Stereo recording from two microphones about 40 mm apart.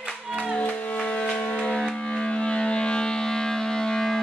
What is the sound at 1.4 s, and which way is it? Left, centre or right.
Civil defense siren, left.